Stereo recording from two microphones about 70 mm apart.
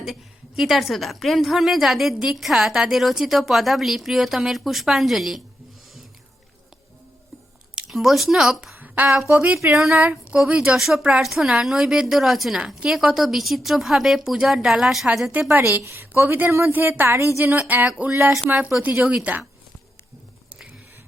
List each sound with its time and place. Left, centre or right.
0.0 s a woman's voice: centre
7.9 s a woman's voice: centre
15.5 s a woman's voice: right
16.5 s a woman's voice: right
17.2 s speech: right
17.4 s speech: right